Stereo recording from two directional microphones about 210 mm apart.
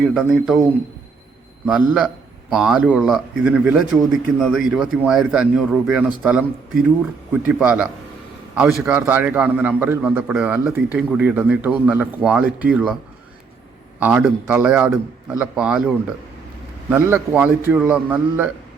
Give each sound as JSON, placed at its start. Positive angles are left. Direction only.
{"t": 0.0, "sound": "a man's voice", "side_deg": -5}
{"t": 1.6, "sound": "a man's voice", "side_deg": -5}
{"t": 14.0, "sound": "a man's voice", "side_deg": -5}
{"t": 16.9, "sound": "a man's voice", "side_deg": -5}